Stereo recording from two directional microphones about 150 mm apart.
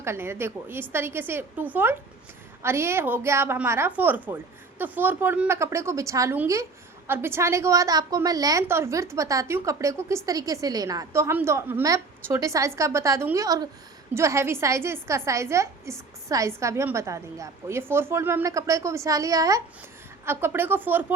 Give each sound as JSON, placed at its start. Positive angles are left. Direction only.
{"t": 0.0, "sound": "a woman's voice", "side_deg": -15}